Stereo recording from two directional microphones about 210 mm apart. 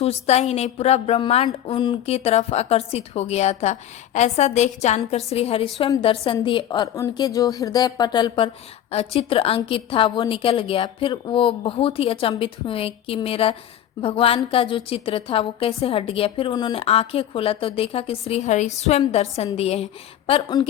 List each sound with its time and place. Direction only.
0.0 s speech: 30° left (ahead or behind)